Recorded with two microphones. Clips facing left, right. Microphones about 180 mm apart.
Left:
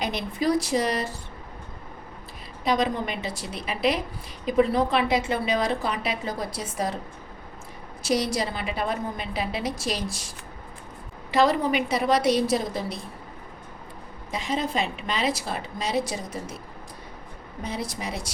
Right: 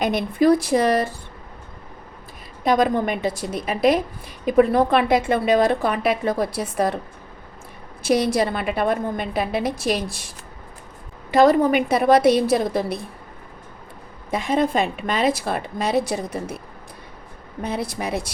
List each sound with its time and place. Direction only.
0.0 s a woman's voice: 55° right (ahead or behind)
2.6 s a woman's voice: 50° right (ahead or behind)
8.0 s a woman's voice: 55° right (ahead or behind)
11.3 s a woman's voice: 50° right (ahead or behind)
14.3 s a woman's voice: 55° right (ahead or behind)
17.6 s a woman's voice: 60° right (ahead or behind)